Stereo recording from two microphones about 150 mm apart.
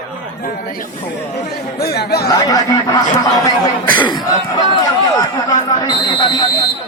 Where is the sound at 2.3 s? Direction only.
25° left (ahead or behind).